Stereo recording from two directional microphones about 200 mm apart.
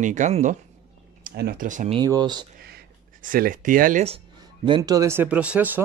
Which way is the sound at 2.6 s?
50° right (ahead or behind).